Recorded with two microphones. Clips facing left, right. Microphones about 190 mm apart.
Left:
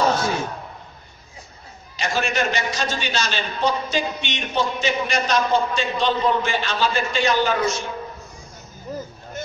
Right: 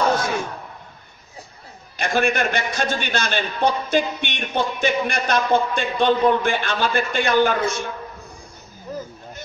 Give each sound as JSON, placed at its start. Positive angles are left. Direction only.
{"t": 2.0, "sound": "a man's voice", "side_deg": -55}